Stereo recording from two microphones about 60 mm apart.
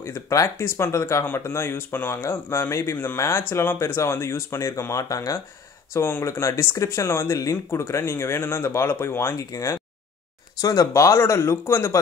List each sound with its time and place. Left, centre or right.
0.6 s speech: left
2.2 s speech: left
5.1 s speech: left
5.9 s speech: left
9.3 s speech: left